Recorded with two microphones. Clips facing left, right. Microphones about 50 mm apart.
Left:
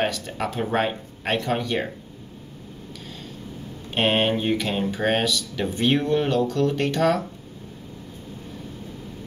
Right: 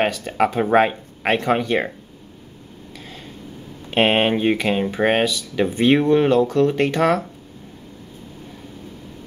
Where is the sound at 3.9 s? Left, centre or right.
Right.